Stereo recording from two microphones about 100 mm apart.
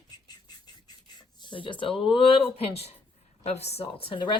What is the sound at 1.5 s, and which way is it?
Speech, 55° left (ahead or behind).